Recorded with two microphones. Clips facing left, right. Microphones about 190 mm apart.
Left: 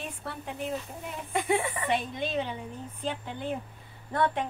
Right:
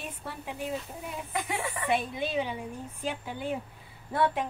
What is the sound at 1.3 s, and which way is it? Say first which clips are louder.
Speech: left 6 dB; 25° left (ahead or behind).